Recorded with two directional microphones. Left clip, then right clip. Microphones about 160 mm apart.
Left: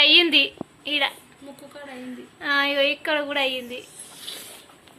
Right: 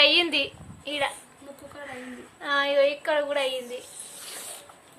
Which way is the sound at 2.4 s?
10° left (ahead or behind).